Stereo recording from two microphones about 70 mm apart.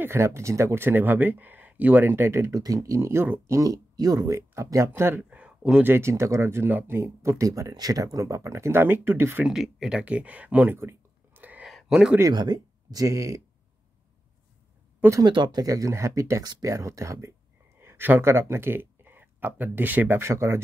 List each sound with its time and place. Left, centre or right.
0.0 s speech: right
2.5 s speech: right
4.4 s speech: right
5.3 s a sound: centre
5.9 s speech: right
6.7 s speech: right
7.0 s speech: right
9.4 s speech: centre
10.8 s whispering: right
11.6 s a sound: centre
12.3 s speech: right
15.2 s speech: right
15.6 s speech: right
17.7 s speech: right